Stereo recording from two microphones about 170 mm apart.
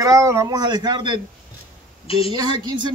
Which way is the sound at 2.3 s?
25° right (ahead or behind).